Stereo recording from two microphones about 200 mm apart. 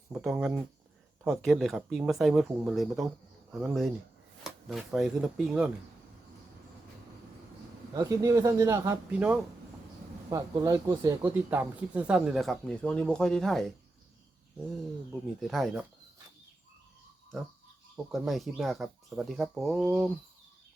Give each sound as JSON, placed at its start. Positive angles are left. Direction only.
{"t": 0.1, "sound": "speech", "side_deg": -5}
{"t": 7.9, "sound": "speech", "side_deg": -15}
{"t": 10.2, "sound": "speech", "side_deg": -15}
{"t": 15.4, "sound": "speech", "side_deg": 0}
{"t": 17.9, "sound": "speech", "side_deg": 0}